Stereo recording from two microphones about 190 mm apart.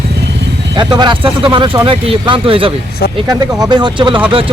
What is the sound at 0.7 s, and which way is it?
Speech, 25° right (ahead or behind).